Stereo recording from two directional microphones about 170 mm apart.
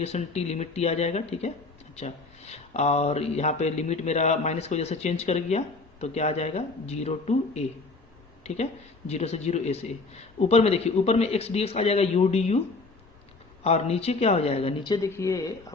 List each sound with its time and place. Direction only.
0.0 s speech: 40° left (ahead or behind)
9.0 s speech: 40° left (ahead or behind)
13.7 s speech: 40° left (ahead or behind)
14.9 s speech: 20° left (ahead or behind)